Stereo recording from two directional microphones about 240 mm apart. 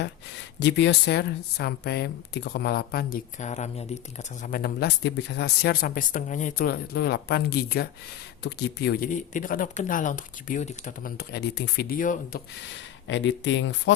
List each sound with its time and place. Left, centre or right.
0.0 s a woman's voice: left
12.7 s speech: left